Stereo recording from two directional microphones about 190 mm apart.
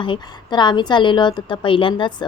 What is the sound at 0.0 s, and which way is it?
A woman's voice, 25° left (ahead or behind).